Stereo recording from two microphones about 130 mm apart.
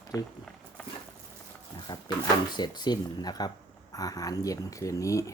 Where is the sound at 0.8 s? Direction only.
10° left (ahead or behind).